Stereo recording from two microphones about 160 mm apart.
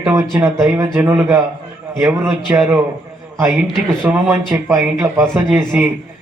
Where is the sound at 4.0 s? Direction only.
15° right (ahead or behind).